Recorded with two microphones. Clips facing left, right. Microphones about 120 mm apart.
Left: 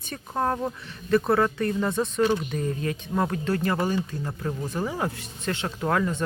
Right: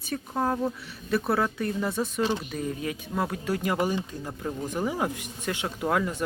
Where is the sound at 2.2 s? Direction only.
25° right (ahead or behind).